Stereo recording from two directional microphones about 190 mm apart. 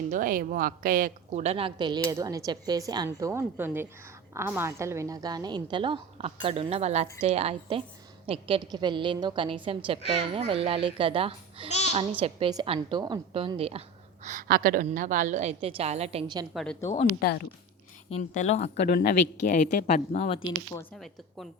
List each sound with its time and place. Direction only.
0.1 s a woman's voice: 45° right (ahead or behind); by 11.7 s 30° right (ahead or behind)
11.7 s a child's voice: 35° left (ahead or behind)
12.2 s a woman's voice: 25° right (ahead or behind)
14.3 s a woman's voice: 45° right (ahead or behind); by 16.5 s 25° right (ahead or behind)
17.2 s speech: 55° left (ahead or behind)
18.2 s a woman's voice: 40° left (ahead or behind)
18.9 s a woman's voice: 55° left (ahead or behind); by 20.5 s 30° left (ahead or behind)
20.9 s speech: centre (ahead or behind)